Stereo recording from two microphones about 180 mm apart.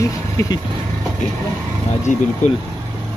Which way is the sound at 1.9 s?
40° left (ahead or behind).